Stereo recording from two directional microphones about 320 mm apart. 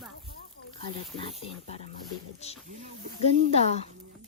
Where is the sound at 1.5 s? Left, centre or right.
Centre.